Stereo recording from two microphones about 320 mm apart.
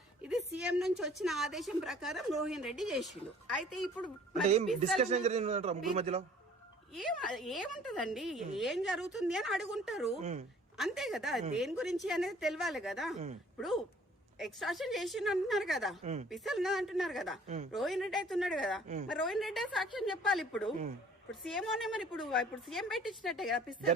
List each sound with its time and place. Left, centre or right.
0.2 s a woman's voice: centre
4.4 s a man's voice: right
6.9 s a woman's voice: centre